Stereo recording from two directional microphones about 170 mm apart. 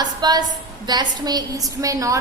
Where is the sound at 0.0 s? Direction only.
25° right (ahead or behind).